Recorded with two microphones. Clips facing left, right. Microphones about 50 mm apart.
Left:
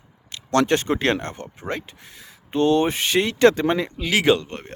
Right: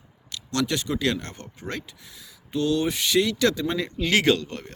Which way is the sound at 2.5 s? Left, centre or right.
Left.